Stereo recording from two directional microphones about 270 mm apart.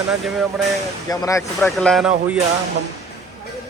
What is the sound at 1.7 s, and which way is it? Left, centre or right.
Speech, centre.